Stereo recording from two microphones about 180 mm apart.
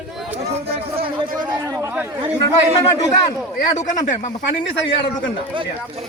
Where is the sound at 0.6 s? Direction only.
35° right (ahead or behind).